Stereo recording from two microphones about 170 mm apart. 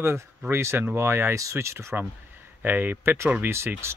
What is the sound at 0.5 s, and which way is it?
Speech, 15° right (ahead or behind).